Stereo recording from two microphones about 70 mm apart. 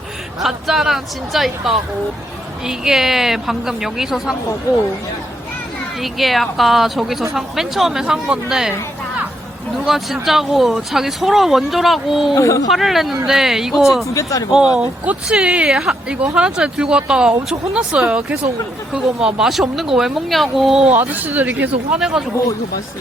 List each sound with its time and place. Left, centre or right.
0.4 s a woman's voice: centre
6.0 s a woman's voice: centre
9.8 s a woman's voice: centre
12.3 s speech: left
12.6 s a woman's voice: centre
14.1 s speech: left
14.8 s a woman's voice: right; by 20.8 s centre
20.8 s speech: right